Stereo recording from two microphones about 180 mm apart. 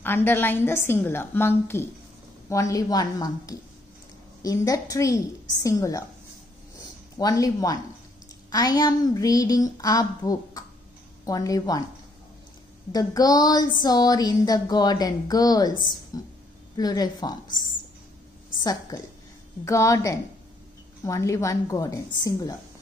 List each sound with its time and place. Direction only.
0.0 s a woman's voice: 10° left (ahead or behind)
7.2 s speech: 20° left (ahead or behind)
12.9 s a woman's voice: 20° left (ahead or behind)